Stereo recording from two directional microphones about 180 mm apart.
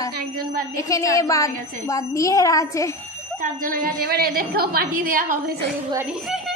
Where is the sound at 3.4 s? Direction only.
50° right (ahead or behind).